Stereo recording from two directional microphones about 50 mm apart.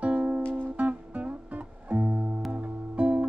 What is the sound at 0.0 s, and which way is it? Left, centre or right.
Music, right.